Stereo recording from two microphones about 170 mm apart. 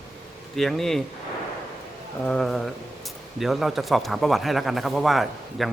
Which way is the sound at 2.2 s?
Centre (ahead or behind).